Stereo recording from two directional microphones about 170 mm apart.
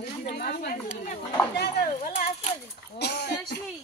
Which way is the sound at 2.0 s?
55° left (ahead or behind).